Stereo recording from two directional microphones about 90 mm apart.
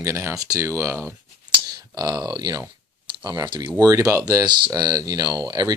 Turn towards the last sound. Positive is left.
turn(degrees=-50)  # may be behind; listen again after turning